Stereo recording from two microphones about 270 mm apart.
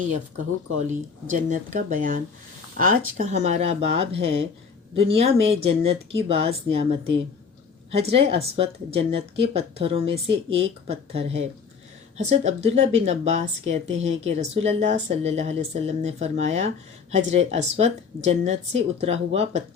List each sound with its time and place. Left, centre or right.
0.9 s a woman's voice: right